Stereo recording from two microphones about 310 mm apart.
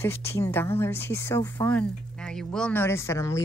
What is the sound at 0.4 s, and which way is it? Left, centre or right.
Speech, centre.